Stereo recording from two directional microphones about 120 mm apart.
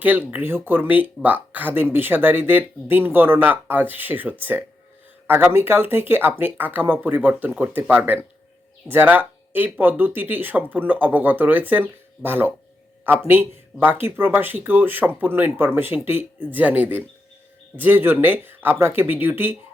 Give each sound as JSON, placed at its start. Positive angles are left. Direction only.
{"t": 0.0, "sound": "speech", "side_deg": -15}